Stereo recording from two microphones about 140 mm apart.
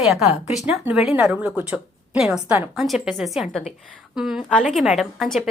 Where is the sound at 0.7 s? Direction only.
5° right (ahead or behind).